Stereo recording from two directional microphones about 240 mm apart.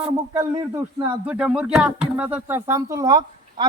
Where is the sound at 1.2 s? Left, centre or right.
Centre.